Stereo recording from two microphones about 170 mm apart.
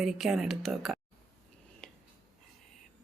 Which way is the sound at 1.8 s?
Centre (ahead or behind).